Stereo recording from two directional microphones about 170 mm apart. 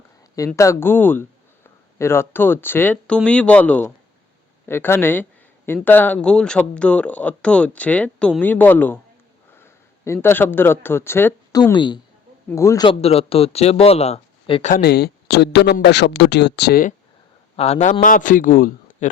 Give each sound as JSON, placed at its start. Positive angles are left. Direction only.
{"t": 0.3, "sound": "speech", "side_deg": 20}
{"t": 11.6, "sound": "a woman's voice", "side_deg": 25}
{"t": 14.7, "sound": "speech", "side_deg": 70}
{"t": 17.6, "sound": "a man's voice", "side_deg": 40}